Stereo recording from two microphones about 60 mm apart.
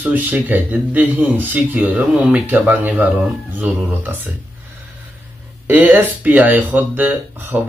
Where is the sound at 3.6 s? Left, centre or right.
Right.